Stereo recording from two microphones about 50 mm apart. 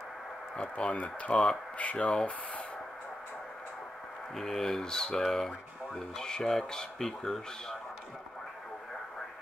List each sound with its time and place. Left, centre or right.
0.6 s speech: left
4.4 s speech: centre